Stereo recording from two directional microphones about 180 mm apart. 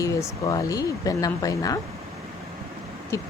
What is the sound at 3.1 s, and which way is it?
Speech, 15° left (ahead or behind).